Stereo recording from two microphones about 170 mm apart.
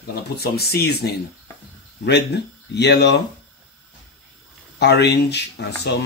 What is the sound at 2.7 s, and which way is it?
Speech, 80° left.